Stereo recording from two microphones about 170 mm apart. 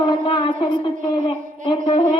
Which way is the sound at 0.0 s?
25° left (ahead or behind).